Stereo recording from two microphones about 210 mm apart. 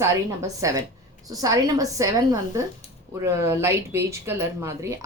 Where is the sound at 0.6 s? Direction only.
15° right (ahead or behind).